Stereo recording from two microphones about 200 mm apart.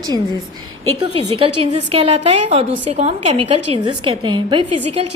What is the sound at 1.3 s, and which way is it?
A woman's voice, 25° right (ahead or behind).